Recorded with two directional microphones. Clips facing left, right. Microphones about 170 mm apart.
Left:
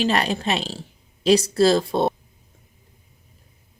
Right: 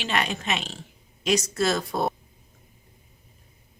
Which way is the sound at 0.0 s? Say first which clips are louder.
Left 6 dB; 35° left (ahead or behind).